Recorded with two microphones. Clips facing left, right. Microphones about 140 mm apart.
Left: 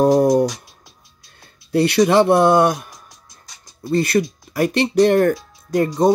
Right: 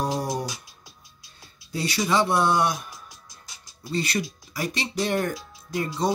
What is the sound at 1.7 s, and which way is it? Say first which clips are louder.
Speech: left 10 dB; 65° left (ahead or behind).